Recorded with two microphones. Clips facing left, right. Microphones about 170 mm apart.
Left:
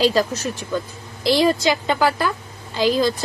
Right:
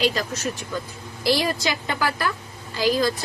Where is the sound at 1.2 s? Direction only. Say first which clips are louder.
Left 5 dB; 25° left (ahead or behind).